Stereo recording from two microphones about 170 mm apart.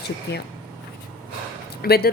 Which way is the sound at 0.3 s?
75° left (ahead or behind).